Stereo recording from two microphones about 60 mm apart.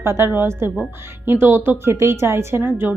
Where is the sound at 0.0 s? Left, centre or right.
Right.